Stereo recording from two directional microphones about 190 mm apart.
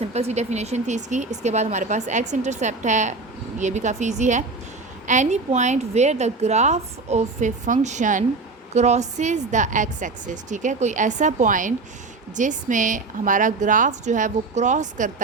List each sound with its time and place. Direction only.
0.1 s a woman's voice: 35° right (ahead or behind)